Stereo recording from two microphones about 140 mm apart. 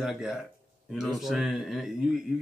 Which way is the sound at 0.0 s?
5° right (ahead or behind).